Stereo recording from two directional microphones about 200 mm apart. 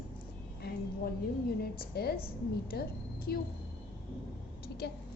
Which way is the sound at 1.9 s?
50° left (ahead or behind).